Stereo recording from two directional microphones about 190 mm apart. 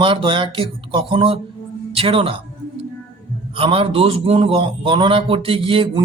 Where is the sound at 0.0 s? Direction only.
25° right (ahead or behind).